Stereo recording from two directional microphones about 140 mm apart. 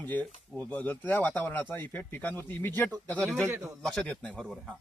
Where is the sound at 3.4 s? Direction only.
20° right (ahead or behind).